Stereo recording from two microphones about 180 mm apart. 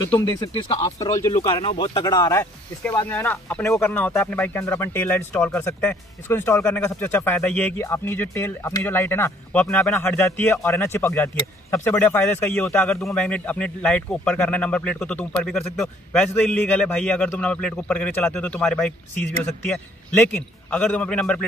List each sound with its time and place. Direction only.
0.9 s speech: 20° left (ahead or behind)
20.3 s speech: 5° left (ahead or behind)